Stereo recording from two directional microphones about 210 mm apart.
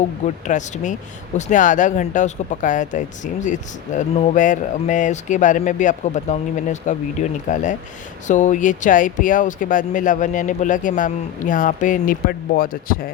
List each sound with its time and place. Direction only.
0.0 s speech: 35° left (ahead or behind)